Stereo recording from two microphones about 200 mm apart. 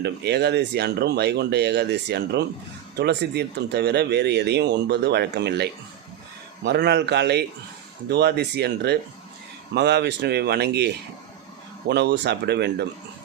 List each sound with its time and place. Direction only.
0.0 s speech: 55° right (ahead or behind)
6.7 s speech: 55° right (ahead or behind)